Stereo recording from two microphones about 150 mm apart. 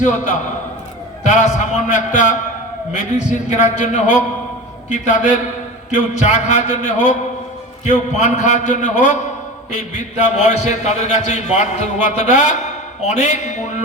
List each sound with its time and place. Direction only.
1.2 s a man's voice: 55° left (ahead or behind)